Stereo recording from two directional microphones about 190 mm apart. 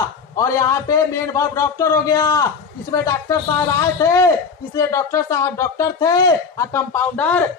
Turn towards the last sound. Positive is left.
turn(degrees=10)  # may be behind; listen again after turning